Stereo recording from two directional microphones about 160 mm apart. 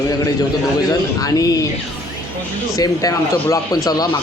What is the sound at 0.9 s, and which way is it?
Speech, 20° left (ahead or behind).